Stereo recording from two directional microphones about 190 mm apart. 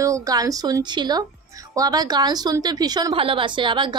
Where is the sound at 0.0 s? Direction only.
20° right (ahead or behind).